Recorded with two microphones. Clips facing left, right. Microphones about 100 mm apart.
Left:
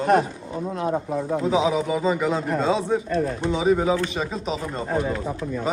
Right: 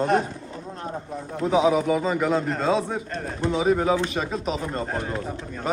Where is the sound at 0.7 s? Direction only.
85° left.